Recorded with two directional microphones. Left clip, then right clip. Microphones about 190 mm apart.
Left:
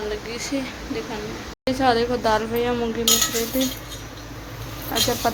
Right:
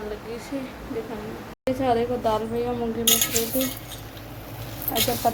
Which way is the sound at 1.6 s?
Centre (ahead or behind).